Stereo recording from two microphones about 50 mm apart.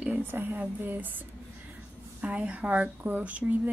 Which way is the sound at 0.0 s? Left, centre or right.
Right.